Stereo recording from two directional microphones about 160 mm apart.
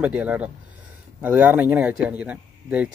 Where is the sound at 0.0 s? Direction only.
10° right (ahead or behind).